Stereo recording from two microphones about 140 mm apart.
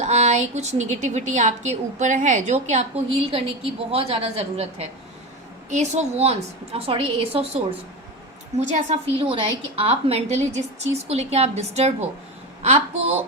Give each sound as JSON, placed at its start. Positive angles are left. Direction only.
{"t": 0.0, "sound": "a woman's voice", "side_deg": -55}
{"t": 8.5, "sound": "a woman's voice", "side_deg": -55}
{"t": 9.1, "sound": "a woman's voice", "side_deg": -35}